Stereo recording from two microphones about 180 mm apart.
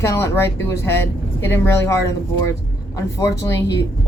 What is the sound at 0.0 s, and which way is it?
Speech, 15° left (ahead or behind).